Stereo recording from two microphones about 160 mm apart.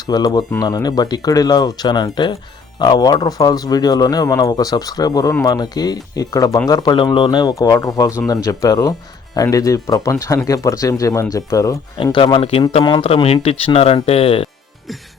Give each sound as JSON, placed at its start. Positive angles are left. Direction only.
{"t": 0.0, "sound": "speech", "side_deg": 25}
{"t": 12.1, "sound": "speech", "side_deg": 30}